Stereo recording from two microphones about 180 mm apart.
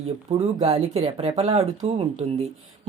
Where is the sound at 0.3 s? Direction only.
35° right (ahead or behind).